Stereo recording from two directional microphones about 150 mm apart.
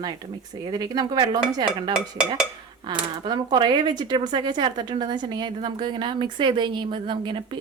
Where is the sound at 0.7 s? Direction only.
25° right (ahead or behind).